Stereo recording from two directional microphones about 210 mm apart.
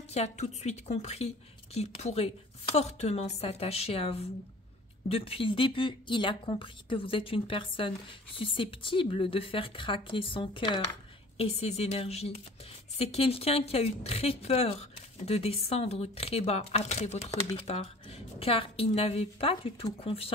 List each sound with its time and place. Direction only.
0.1 s a woman's voice: 30° left (ahead or behind)